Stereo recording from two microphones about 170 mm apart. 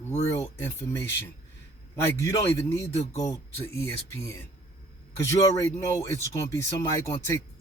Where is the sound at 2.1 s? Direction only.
15° left (ahead or behind).